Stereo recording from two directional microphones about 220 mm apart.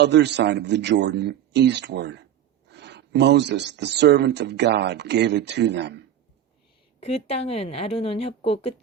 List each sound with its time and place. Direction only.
0.0 s speech: 50° right (ahead or behind)
7.0 s a woman's voice: 30° left (ahead or behind)